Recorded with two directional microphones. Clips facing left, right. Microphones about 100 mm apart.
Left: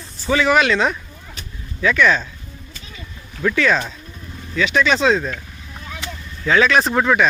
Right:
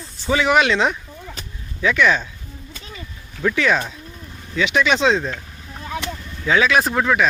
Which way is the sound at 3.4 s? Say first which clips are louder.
Left 1 dB; 10° right (ahead or behind).